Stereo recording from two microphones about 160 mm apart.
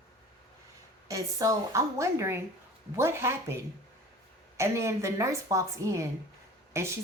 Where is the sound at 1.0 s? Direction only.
20° right (ahead or behind).